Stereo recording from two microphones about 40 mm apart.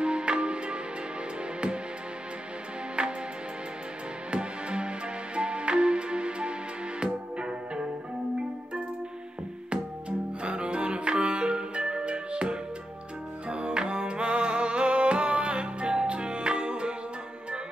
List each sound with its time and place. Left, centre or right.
0.0 s music: right
3.0 s music: right
4.3 s music: right
9.7 s music: right